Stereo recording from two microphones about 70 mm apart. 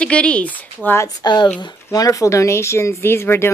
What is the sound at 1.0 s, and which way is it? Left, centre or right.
Speech, left.